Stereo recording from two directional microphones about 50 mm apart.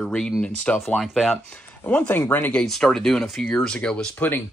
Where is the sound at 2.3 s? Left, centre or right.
Left.